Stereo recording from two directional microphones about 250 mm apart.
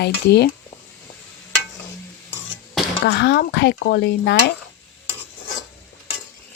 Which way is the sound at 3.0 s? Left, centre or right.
Left.